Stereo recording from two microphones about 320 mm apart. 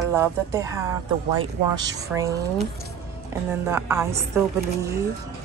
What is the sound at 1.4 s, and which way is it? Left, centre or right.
Speech, right.